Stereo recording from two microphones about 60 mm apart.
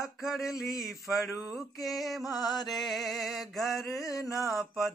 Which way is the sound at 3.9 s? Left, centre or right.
Left.